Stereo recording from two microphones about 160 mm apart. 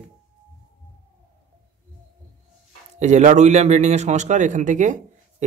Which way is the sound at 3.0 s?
45° right (ahead or behind).